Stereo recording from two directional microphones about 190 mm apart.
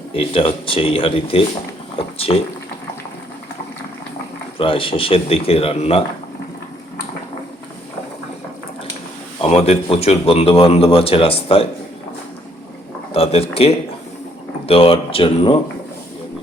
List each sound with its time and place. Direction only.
0.1 s speech: 30° left (ahead or behind)
4.5 s speech: 30° left (ahead or behind)
9.4 s a man's voice: 30° left (ahead or behind)
13.1 s a man's voice: 30° left (ahead or behind)